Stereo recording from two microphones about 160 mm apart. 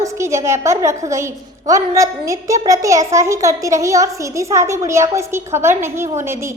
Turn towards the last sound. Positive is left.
turn(degrees=-15)  # may be behind; listen again after turning